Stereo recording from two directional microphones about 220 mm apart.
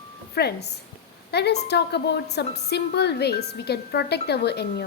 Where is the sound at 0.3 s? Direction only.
45° left (ahead or behind).